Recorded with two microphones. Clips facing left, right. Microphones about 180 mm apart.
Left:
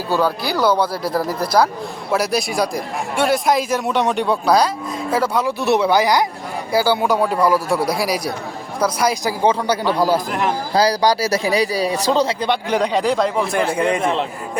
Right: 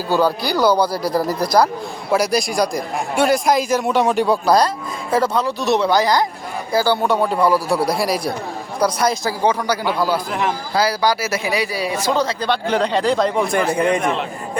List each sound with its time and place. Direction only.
0.1 s a man's voice: centre (ahead or behind); by 6.2 s 15° left (ahead or behind)
6.9 s a man's voice: 5° left (ahead or behind)
9.6 s speech: 35° left (ahead or behind)
12.3 s a man's voice: 20° left (ahead or behind); by 14.2 s centre (ahead or behind)